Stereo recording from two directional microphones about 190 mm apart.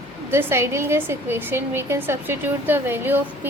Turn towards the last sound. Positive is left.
turn(degrees=-10)  # may be behind; listen again after turning